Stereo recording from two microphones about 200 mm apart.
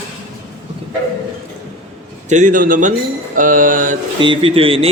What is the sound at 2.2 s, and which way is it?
A man's voice, 40° right (ahead or behind).